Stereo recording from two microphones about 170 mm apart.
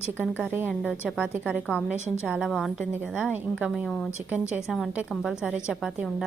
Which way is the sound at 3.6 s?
10° right (ahead or behind).